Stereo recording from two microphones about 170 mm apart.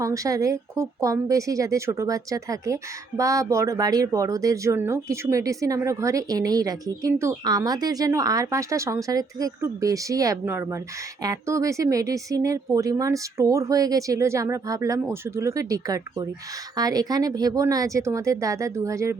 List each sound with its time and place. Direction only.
0.0 s speech: 20° right (ahead or behind)